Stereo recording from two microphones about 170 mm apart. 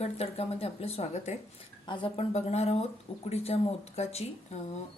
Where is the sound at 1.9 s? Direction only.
30° left (ahead or behind).